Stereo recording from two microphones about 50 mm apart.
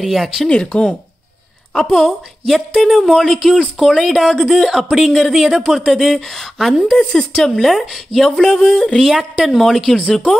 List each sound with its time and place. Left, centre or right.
0.0 s speech: centre
0.5 s a woman's voice: centre
7.1 s a woman's voice: centre
9.0 s speech: centre